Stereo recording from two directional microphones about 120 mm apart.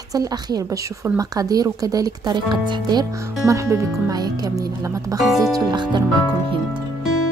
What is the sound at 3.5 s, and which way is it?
Speech, 25° right (ahead or behind).